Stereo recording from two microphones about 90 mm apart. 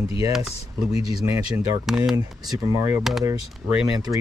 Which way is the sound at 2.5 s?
40° right (ahead or behind).